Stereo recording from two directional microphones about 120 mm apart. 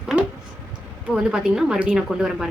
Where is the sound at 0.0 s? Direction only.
5° right (ahead or behind).